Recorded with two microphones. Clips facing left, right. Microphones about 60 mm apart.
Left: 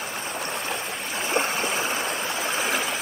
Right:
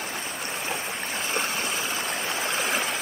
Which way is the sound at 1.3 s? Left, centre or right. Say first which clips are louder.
Left 5 dB; left.